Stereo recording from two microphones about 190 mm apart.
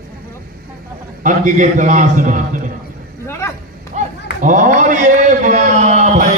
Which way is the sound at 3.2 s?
15° left (ahead or behind).